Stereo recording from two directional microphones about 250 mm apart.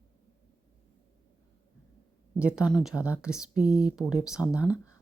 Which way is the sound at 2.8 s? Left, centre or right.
Centre.